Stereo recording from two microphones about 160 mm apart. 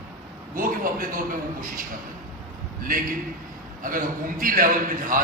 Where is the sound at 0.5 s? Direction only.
60° right (ahead or behind).